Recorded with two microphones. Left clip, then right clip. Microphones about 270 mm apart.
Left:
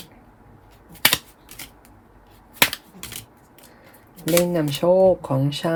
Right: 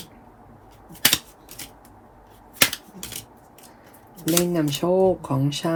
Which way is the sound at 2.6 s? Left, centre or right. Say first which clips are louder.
Left 1 dB; centre.